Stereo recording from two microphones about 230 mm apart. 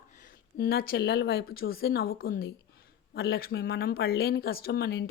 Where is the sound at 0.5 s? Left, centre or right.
Left.